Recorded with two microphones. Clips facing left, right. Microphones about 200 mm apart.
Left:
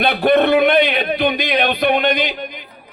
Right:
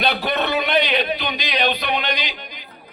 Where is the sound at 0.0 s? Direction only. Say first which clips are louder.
Left 8 dB; 55° left (ahead or behind).